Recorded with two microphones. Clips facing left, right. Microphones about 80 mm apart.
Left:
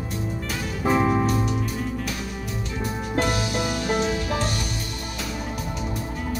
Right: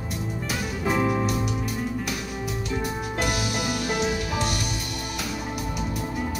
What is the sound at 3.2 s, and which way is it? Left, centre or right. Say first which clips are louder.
Music: left 1 dB; centre.